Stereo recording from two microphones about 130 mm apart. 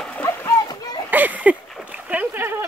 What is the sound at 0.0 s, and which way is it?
Splash, 10° left (ahead or behind).